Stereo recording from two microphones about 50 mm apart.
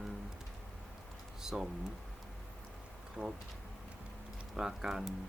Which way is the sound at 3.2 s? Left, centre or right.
Centre.